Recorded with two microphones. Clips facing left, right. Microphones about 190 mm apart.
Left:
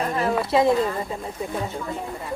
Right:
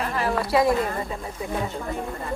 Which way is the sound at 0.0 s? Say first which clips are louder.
Left 2 dB; 25° left (ahead or behind).